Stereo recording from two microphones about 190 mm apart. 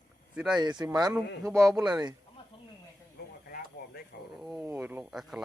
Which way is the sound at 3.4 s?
50° left (ahead or behind).